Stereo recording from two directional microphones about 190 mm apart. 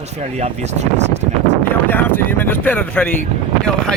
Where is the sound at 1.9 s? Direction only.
10° left (ahead or behind).